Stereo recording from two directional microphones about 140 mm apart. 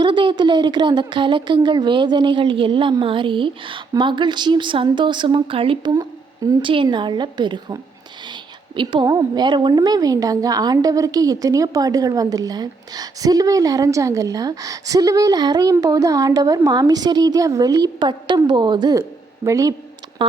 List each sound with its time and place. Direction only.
0.0 s a woman's voice: 35° right (ahead or behind)
5.9 s a woman's voice: 25° right (ahead or behind)